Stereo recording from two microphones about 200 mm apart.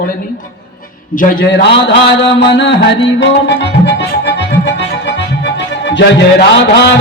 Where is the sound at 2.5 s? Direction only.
65° left (ahead or behind).